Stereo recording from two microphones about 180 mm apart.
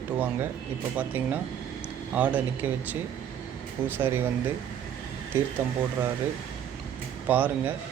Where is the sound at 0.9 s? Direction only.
10° right (ahead or behind).